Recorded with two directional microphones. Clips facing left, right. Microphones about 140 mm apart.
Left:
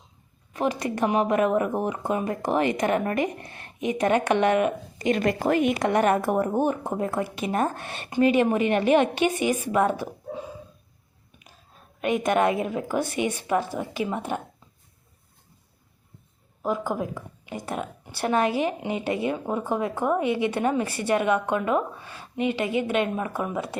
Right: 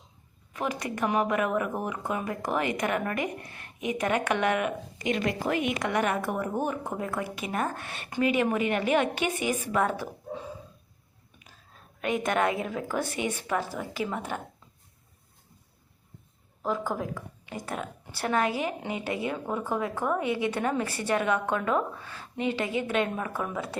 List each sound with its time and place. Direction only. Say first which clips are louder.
0.5 s speech: left 5 dB; 30° left (ahead or behind)
12.0 s a woman's voice: left 4 dB; 15° left (ahead or behind)
16.6 s speech: left 3 dB; 15° left (ahead or behind)